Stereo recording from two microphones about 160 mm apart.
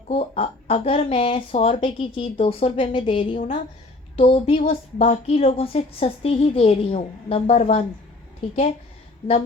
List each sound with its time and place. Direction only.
0.1 s a woman's voice: 35° left (ahead or behind)